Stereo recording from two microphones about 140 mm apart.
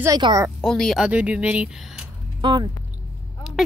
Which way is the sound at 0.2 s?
30° right (ahead or behind).